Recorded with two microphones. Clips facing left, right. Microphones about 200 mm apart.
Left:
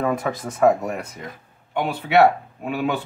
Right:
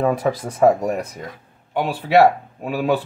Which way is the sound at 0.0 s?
35° right (ahead or behind).